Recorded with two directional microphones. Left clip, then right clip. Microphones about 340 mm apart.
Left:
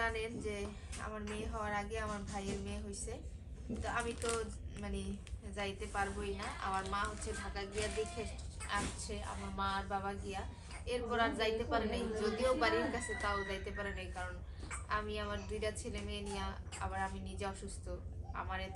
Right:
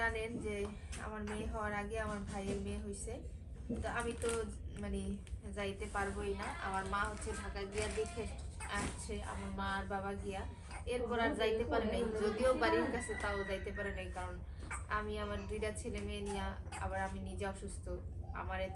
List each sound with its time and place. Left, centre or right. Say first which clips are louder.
0.0 s a woman's voice: even; centre
8.6 s a woman's voice: left 2 dB; centre